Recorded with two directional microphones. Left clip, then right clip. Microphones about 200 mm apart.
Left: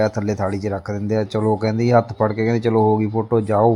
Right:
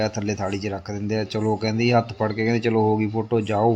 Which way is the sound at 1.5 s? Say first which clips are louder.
Left 4 dB; 5° left (ahead or behind).